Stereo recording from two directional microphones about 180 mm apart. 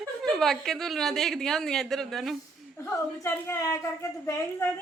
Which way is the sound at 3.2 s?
15° left (ahead or behind).